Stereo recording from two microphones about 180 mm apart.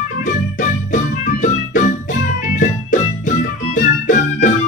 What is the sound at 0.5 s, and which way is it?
Music, 45° left (ahead or behind).